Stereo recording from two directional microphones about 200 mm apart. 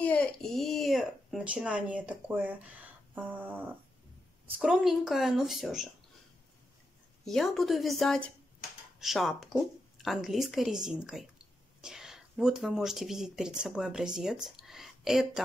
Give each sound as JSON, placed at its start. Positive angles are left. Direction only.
{"t": 0.0, "sound": "speech", "side_deg": 5}
{"t": 7.2, "sound": "speech", "side_deg": 0}